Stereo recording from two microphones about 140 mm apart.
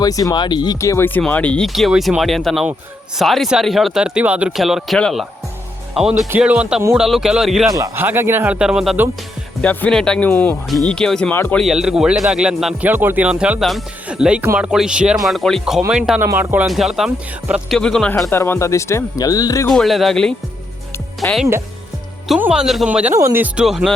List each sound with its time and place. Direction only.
0.0 s speech: 25° left (ahead or behind); by 7.7 s 5° right (ahead or behind)
7.7 s speech: 20° right (ahead or behind); by 9.0 s 5° right (ahead or behind)
9.6 s speech: 10° left (ahead or behind)
11.6 s speech: 5° right (ahead or behind)
14.7 s speech: 5° right (ahead or behind)
16.2 s speech: 15° right (ahead or behind)
16.6 s speech: centre (ahead or behind)
18.3 s speech: 15° left (ahead or behind)
19.6 s speech: centre (ahead or behind); by 23.6 s 15° right (ahead or behind)
23.6 s speech: centre (ahead or behind)